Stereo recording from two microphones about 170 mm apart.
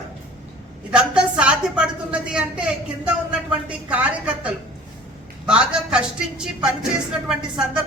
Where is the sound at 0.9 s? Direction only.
5° right (ahead or behind).